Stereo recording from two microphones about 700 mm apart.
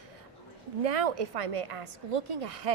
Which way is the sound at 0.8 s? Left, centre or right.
Right.